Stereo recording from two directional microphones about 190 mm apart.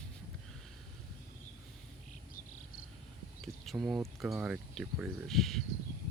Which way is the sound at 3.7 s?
Centre (ahead or behind).